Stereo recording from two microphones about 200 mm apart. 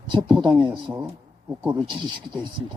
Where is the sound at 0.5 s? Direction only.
25° right (ahead or behind).